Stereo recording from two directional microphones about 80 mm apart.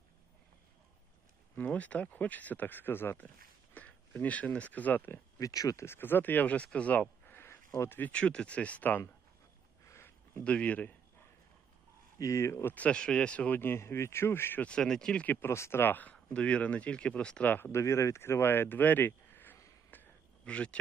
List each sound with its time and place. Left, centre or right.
1.5 s speech: left
5.4 s speech: left
5.8 s speech: left
6.7 s a sound: centre
7.8 s speech: left
8.1 s speech: centre
9.8 s a sound: left
10.4 s speech: centre
12.2 s speech: left
12.7 s speech: centre
14.6 s speech: centre
15.4 s speech: left
17.7 s speech: left
19.9 s a sound: centre